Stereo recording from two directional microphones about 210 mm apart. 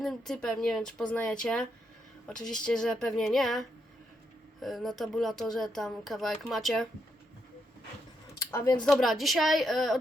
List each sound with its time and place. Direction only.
0.0 s speech: centre (ahead or behind)
8.4 s speech: 15° left (ahead or behind)
8.9 s speech: centre (ahead or behind)